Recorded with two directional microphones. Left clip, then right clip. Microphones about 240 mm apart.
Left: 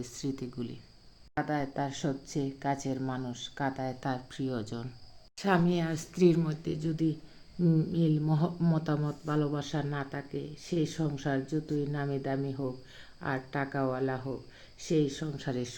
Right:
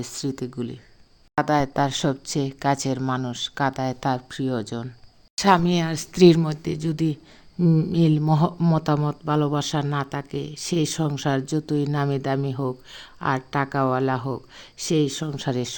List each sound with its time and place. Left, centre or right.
0.0 s speech: right
1.4 s speech: right
5.4 s speech: right